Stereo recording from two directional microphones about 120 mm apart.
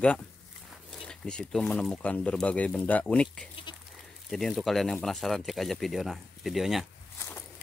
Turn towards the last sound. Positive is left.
turn(degrees=0)  # may be behind; listen again after turning